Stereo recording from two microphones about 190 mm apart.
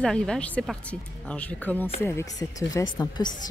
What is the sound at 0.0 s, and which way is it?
Speech, 5° left (ahead or behind).